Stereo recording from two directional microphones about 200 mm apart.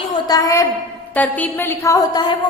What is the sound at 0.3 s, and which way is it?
A woman's voice, 15° left (ahead or behind).